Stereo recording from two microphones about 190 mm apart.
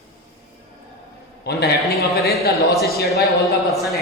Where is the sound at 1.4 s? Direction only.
60° left (ahead or behind).